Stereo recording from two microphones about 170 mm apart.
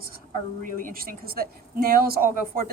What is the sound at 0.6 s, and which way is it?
Speech, 50° right (ahead or behind).